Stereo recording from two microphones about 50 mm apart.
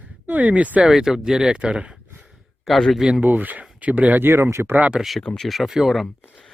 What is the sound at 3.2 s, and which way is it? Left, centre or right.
Speech, right.